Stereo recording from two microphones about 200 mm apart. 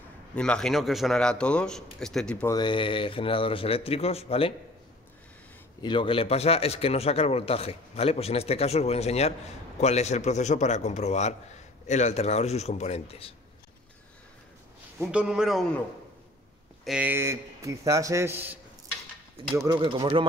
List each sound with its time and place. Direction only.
0.4 s a man's voice: 5° left (ahead or behind)
2.4 s speech: 20° left (ahead or behind)
5.8 s speech: 25° left (ahead or behind)
15.0 s a man's voice: 5° right (ahead or behind)
16.8 s a man's voice: 5° right (ahead or behind); by 20.2 s 25° right (ahead or behind)